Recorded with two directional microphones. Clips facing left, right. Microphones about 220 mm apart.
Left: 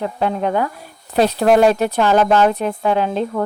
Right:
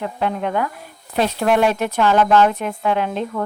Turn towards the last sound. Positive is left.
turn(degrees=35)  # may be behind; listen again after turning